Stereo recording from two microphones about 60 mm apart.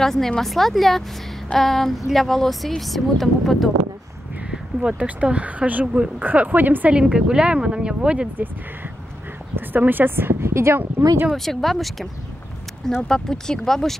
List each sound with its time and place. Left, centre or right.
0.0 s speech: centre
4.5 s speech: centre
7.0 s speech: centre
9.7 s a woman's voice: right
11.3 s speech: centre
13.1 s speech: centre